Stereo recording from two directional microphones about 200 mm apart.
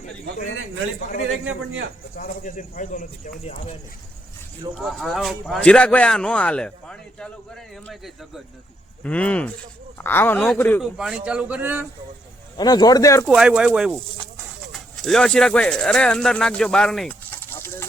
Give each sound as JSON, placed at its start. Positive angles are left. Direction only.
{"t": 2.1, "sound": "speech", "side_deg": 45}
{"t": 4.8, "sound": "speech", "side_deg": 0}
{"t": 12.5, "sound": "speech", "side_deg": 20}
{"t": 13.2, "sound": "speech", "side_deg": -5}